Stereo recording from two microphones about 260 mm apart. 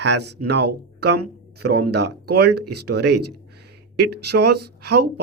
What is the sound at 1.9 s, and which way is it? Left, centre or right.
Speech, right.